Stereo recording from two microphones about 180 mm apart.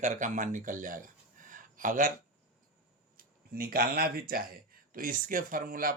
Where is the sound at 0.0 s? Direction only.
45° right (ahead or behind).